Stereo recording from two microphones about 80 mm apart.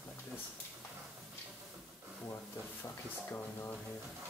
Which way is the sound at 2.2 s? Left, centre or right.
Left.